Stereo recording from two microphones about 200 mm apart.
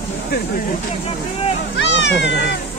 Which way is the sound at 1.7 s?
60° left (ahead or behind).